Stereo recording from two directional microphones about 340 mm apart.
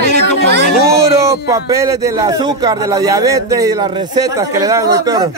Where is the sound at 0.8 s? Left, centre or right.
Centre.